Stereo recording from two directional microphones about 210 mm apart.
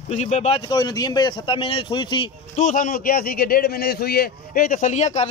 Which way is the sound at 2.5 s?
35° left (ahead or behind).